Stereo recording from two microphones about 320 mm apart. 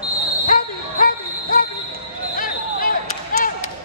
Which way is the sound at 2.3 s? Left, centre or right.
Left.